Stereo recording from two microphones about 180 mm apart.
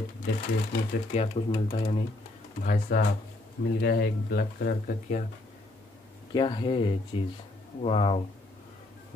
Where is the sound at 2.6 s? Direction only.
55° left (ahead or behind).